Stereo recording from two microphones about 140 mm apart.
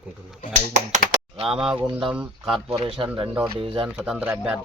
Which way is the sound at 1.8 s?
35° right (ahead or behind).